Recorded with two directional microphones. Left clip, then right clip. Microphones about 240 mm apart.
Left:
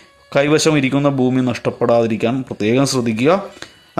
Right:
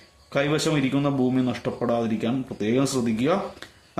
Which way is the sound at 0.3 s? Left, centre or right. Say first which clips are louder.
Left 9 dB; left.